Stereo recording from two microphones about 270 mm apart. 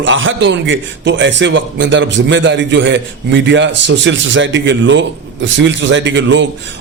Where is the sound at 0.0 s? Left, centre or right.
Right.